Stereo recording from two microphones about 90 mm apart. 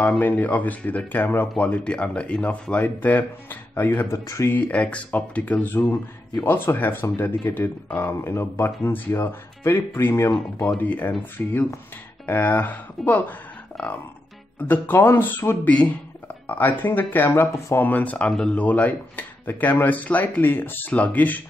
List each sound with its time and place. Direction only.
0.2 s speech: 20° left (ahead or behind)
1.6 s speech: 15° left (ahead or behind)
4.1 s speech: 30° left (ahead or behind)
4.6 s speech: 15° left (ahead or behind)